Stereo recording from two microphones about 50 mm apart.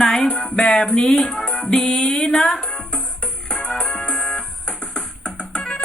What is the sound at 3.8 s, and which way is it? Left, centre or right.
Music, left.